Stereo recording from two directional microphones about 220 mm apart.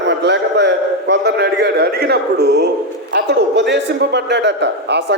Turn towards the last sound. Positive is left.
turn(degrees=-50)  # may be behind; listen again after turning